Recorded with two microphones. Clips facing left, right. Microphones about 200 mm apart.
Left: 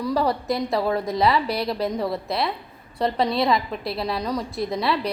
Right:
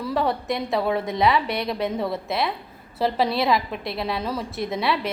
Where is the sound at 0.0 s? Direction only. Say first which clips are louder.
Left 1 dB; centre (ahead or behind).